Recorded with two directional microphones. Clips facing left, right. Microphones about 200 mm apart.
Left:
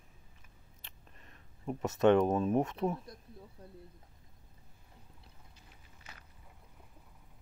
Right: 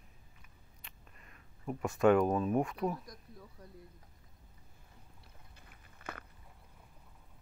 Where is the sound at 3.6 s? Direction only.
30° left (ahead or behind).